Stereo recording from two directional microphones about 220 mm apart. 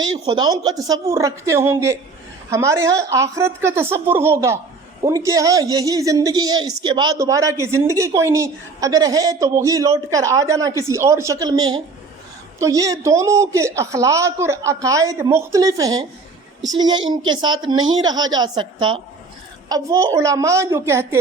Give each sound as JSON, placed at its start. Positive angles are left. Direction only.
{"t": 0.3, "sound": "a woman's voice", "side_deg": -20}